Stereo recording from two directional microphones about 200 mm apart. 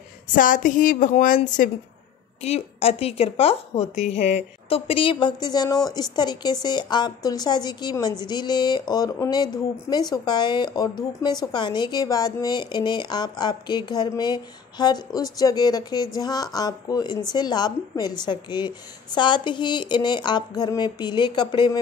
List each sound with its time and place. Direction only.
0.3 s a woman's voice: 40° left (ahead or behind); by 21.7 s 25° left (ahead or behind)